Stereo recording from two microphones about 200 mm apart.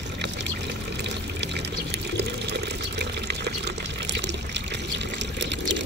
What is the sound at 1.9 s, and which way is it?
Water, 55° right (ahead or behind).